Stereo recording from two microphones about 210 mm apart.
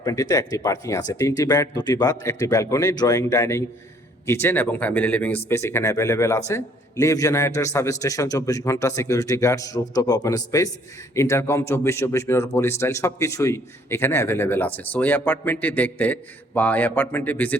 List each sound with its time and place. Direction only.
0.0 s speech: 15° left (ahead or behind)